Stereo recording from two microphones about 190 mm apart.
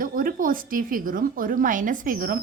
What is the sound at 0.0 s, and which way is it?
Speech, 45° right (ahead or behind).